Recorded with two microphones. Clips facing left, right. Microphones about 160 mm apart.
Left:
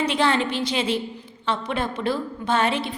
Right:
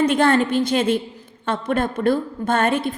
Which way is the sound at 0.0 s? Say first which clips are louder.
Right 5 dB; 50° right (ahead or behind).